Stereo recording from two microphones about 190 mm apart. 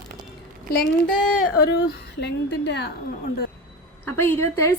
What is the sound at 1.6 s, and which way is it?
A woman's voice, 60° left (ahead or behind).